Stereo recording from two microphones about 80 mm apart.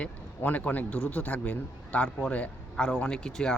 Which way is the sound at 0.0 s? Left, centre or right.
Centre.